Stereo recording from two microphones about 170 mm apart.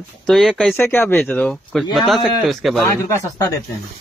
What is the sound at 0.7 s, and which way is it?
Speech, 15° left (ahead or behind).